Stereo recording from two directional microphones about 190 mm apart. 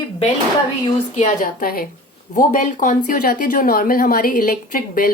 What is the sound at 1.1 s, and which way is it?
A woman's voice, 40° left (ahead or behind).